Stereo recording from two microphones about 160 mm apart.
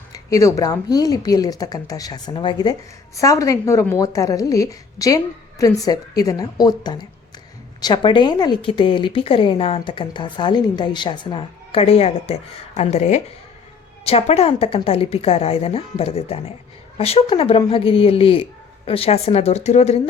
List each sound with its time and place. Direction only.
0.1 s a woman's voice: 20° left (ahead or behind); by 20.0 s 40° left (ahead or behind)